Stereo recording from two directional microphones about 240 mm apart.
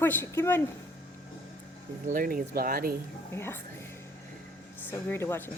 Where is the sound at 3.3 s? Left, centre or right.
Centre.